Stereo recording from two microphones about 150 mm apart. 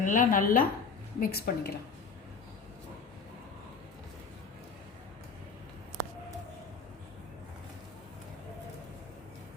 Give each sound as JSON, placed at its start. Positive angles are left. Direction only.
{"t": 0.0, "sound": "a woman's voice", "side_deg": 65}
{"t": 1.2, "sound": "a woman's voice", "side_deg": 90}